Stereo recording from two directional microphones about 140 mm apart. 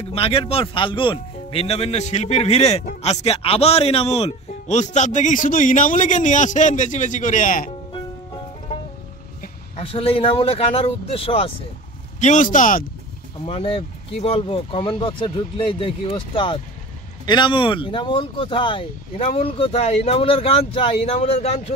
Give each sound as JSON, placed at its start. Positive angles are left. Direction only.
{"t": 0.1, "sound": "speech", "side_deg": 45}
{"t": 9.8, "sound": "speech", "side_deg": 45}
{"t": 12.2, "sound": "speech", "side_deg": 65}
{"t": 13.5, "sound": "speech", "side_deg": 45}